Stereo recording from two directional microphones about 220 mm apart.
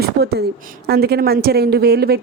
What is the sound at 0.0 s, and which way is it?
Speech, 45° right (ahead or behind).